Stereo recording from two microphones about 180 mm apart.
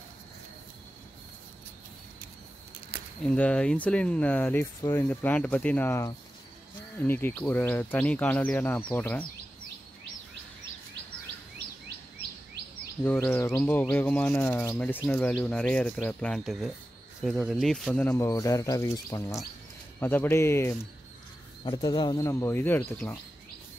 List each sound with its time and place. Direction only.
3.3 s speech: 5° left (ahead or behind)
13.0 s speech: 10° left (ahead or behind)
18.1 s speech: 20° left (ahead or behind)